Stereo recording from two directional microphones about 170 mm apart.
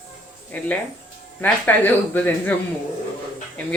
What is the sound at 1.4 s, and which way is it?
Speech, 10° left (ahead or behind).